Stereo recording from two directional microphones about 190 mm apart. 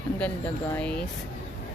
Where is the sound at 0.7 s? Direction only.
5° left (ahead or behind).